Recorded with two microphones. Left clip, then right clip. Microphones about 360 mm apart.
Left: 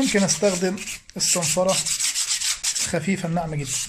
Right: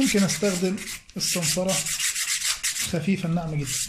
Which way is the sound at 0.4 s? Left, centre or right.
Centre.